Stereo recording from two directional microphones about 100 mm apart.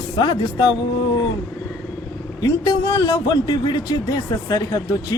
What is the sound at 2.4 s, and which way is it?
A man's voice, 40° left (ahead or behind).